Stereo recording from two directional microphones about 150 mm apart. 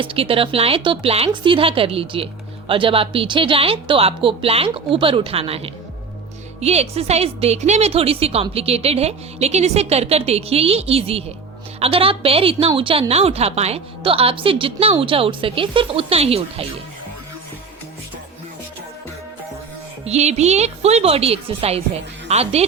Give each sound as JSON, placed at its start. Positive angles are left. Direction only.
{"t": 0.0, "sound": "a woman's voice", "side_deg": -35}
{"t": 20.1, "sound": "a woman's voice", "side_deg": -45}